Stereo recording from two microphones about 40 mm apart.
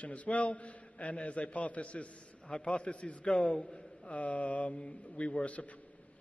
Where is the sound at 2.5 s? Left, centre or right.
Left.